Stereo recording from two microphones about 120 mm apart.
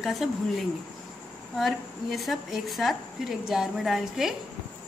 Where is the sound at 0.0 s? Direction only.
Centre (ahead or behind).